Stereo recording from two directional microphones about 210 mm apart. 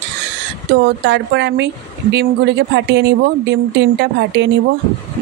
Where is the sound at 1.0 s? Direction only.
55° right (ahead or behind).